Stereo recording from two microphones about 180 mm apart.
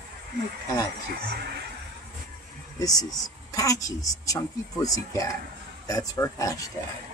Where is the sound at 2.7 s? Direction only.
20° left (ahead or behind).